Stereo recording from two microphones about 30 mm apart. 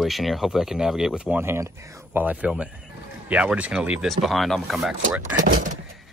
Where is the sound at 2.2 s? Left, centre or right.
Right.